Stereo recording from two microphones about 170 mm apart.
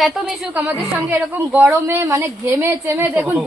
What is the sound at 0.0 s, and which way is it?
A woman's voice, centre (ahead or behind).